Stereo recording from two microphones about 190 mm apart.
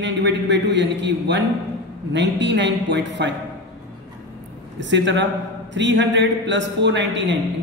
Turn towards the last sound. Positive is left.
turn(degrees=-70)  # may be behind; listen again after turning